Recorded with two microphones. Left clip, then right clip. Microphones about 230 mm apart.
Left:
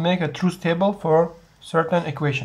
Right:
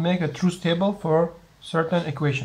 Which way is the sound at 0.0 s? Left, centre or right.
Centre.